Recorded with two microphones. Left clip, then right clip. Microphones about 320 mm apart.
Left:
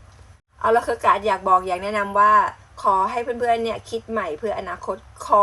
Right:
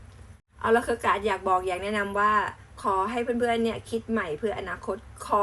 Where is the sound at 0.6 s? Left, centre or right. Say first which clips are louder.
Left 5 dB; centre.